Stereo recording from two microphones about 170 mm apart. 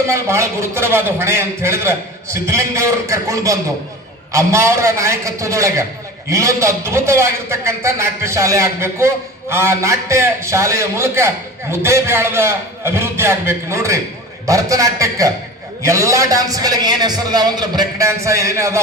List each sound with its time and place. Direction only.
0.1 s a man's voice: 15° right (ahead or behind)